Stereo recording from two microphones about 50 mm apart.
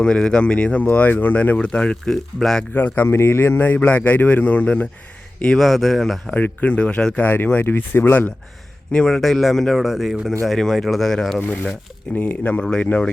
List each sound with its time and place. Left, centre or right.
0.0 s speech: centre; by 1.4 s left
1.5 s speech: left
2.0 s speech: centre
2.7 s a man's voice: left
5.5 s speech: centre
6.3 s speech: left
7.3 s speech: left
8.9 s speech: centre
11.4 s speech: left